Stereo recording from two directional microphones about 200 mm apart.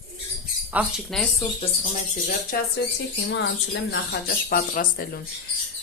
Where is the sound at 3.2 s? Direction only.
60° left (ahead or behind).